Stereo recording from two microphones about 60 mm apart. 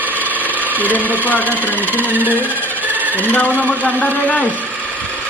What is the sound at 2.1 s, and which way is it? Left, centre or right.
Squeal, right.